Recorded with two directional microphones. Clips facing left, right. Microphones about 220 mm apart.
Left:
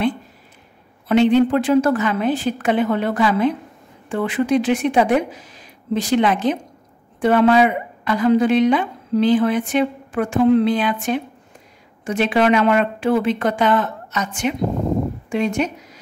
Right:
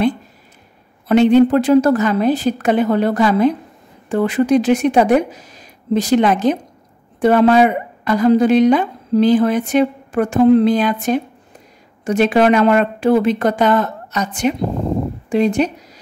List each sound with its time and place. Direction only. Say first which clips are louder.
1.0 s a woman's voice: right 4 dB; 45° right (ahead or behind)